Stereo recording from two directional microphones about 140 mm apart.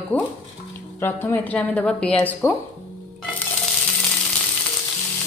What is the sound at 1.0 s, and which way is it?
A woman's voice, 15° left (ahead or behind).